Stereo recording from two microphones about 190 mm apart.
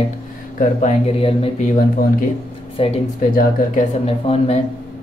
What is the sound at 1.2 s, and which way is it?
Speech, 30° left (ahead or behind).